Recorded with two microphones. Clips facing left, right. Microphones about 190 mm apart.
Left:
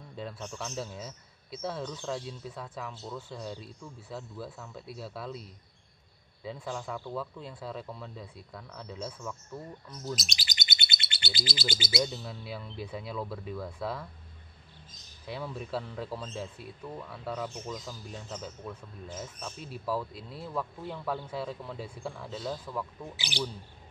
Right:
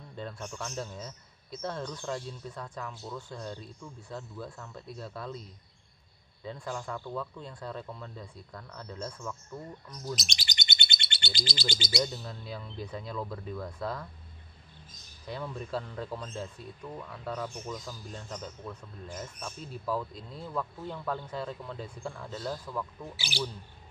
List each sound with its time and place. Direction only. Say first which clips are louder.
0.1 s speech: even; 5° left (ahead or behind)
6.4 s speech: even; 5° left (ahead or behind)
10.1 s bird: even; centre (ahead or behind)
15.2 s a man's voice: even; 5° left (ahead or behind)
23.1 s a man's voice: left 1 dB; 20° left (ahead or behind)